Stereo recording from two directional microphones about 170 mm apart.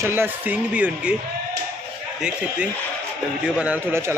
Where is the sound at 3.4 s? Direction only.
10° right (ahead or behind).